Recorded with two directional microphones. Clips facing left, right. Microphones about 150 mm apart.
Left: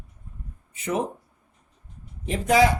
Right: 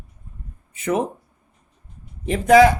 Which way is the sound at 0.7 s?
55° right (ahead or behind).